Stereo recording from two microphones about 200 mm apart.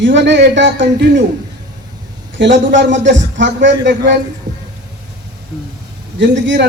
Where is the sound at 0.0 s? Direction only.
60° right (ahead or behind).